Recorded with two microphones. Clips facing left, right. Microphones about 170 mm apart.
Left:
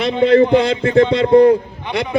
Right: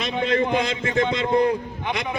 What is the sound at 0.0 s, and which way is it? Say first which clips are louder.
A man's voice: left 10 dB; 30° left (ahead or behind).